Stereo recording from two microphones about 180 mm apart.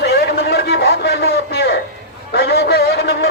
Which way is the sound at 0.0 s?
65° left (ahead or behind).